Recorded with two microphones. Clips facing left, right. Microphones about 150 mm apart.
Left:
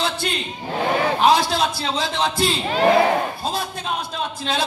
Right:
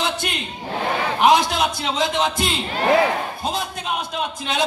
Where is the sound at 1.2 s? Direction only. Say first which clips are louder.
Right 3 dB; 20° right (ahead or behind).